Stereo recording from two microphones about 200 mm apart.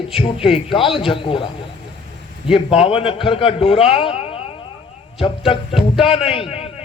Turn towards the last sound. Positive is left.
turn(degrees=30)  # may be behind; listen again after turning